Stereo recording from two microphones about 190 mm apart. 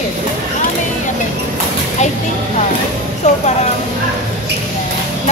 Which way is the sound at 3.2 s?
35° left (ahead or behind).